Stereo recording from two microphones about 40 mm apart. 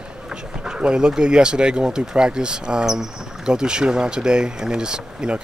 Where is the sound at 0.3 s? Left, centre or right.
Centre.